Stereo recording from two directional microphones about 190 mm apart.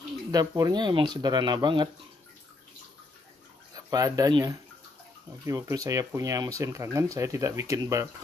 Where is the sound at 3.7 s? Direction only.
20° right (ahead or behind).